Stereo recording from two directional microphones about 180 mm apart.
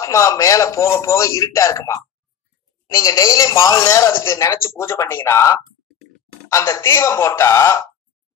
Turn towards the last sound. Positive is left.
turn(degrees=15)  # may be behind; listen again after turning